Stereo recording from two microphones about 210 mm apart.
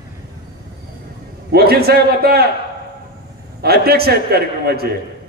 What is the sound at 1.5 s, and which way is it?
Speech, 50° right (ahead or behind).